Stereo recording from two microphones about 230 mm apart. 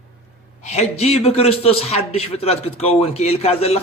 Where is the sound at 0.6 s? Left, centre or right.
Left.